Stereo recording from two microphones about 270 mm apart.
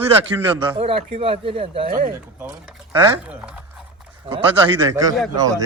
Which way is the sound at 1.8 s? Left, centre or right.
Right.